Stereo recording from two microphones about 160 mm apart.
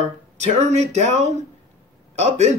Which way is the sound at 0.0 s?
45° right (ahead or behind).